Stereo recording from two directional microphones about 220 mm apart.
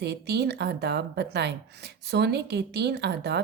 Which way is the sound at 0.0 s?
50° right (ahead or behind).